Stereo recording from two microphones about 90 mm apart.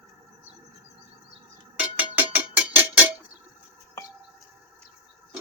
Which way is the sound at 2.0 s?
15° right (ahead or behind).